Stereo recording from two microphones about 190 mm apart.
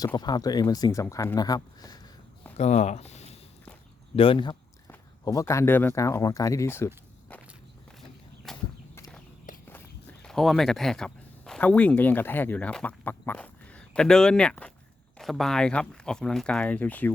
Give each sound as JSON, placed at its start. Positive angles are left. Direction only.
{"t": 0.0, "sound": "speech", "side_deg": 20}
{"t": 2.6, "sound": "a sound", "side_deg": 35}
{"t": 4.1, "sound": "speech", "side_deg": 30}
{"t": 8.5, "sound": "horse", "side_deg": 0}
{"t": 9.5, "sound": "walk", "side_deg": 40}
{"t": 10.2, "sound": "speech", "side_deg": 0}